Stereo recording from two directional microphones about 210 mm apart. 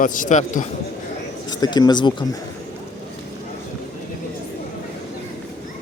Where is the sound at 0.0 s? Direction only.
40° left (ahead or behind).